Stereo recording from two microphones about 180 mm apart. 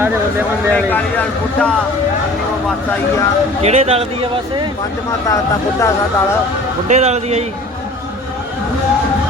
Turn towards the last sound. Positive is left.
turn(degrees=-40)  # may be behind; listen again after turning